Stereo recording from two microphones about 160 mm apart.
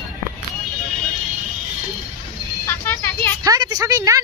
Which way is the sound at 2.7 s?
15° left (ahead or behind).